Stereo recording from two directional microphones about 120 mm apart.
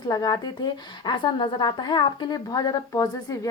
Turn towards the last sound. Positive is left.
turn(degrees=30)  # may be behind; listen again after turning